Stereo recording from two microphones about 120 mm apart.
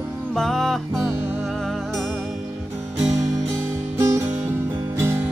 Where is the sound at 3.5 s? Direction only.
20° right (ahead or behind).